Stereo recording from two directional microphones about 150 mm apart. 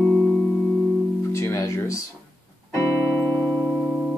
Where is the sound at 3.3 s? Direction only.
25° right (ahead or behind).